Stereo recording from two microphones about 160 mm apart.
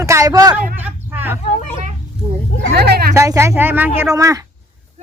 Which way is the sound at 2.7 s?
80° right.